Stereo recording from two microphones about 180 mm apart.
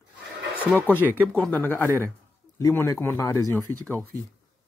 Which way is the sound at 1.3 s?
10° left (ahead or behind).